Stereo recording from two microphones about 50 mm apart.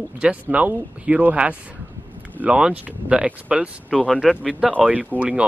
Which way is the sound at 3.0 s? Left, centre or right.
Centre.